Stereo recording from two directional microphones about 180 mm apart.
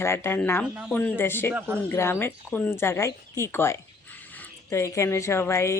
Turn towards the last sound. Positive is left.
turn(degrees=15)  # may be behind; listen again after turning